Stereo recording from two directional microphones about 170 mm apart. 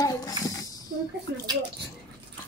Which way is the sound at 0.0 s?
20° left (ahead or behind).